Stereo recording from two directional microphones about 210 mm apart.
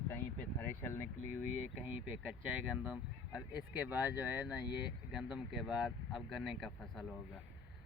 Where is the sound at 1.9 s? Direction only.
5° right (ahead or behind).